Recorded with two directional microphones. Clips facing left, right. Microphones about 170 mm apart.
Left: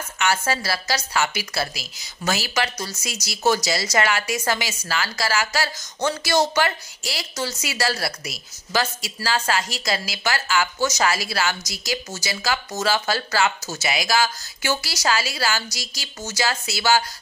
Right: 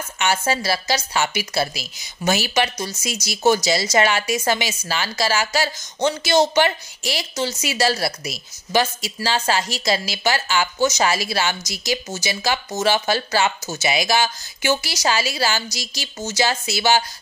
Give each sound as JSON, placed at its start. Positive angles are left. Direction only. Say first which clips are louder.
{"t": 0.2, "sound": "a woman's voice", "louder": "right 2 dB", "side_deg": -20}